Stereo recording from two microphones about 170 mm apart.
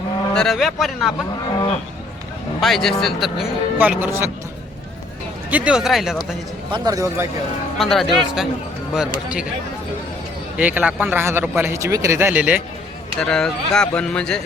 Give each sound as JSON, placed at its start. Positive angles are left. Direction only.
{"t": 0.3, "sound": "speech", "side_deg": 0}
{"t": 2.6, "sound": "speech", "side_deg": 0}
{"t": 5.5, "sound": "speech", "side_deg": -10}
{"t": 6.7, "sound": "speech", "side_deg": -25}
{"t": 7.8, "sound": "speech", "side_deg": 0}
{"t": 10.6, "sound": "a man's voice", "side_deg": -10}
{"t": 13.1, "sound": "speech", "side_deg": 5}